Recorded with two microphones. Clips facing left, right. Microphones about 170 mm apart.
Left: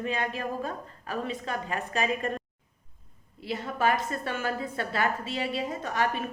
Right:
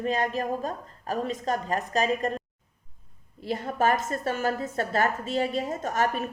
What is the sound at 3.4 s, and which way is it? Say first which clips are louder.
A woman's voice: right 2 dB; 45° right (ahead or behind).